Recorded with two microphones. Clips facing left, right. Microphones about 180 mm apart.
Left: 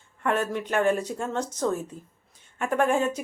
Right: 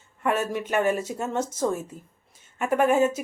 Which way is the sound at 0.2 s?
5° right (ahead or behind).